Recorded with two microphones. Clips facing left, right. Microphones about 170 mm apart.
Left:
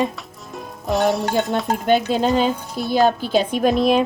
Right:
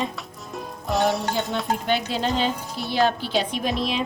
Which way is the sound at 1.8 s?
45° left (ahead or behind).